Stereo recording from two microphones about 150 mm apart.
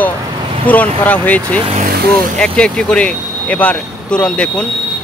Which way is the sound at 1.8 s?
80° right.